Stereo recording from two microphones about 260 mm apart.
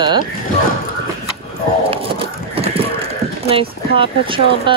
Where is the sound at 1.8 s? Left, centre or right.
Right.